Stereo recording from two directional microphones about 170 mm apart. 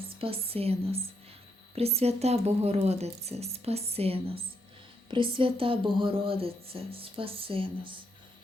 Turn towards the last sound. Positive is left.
turn(degrees=-30)  # may be behind; listen again after turning